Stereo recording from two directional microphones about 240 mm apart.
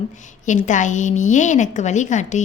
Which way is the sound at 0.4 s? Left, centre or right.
Left.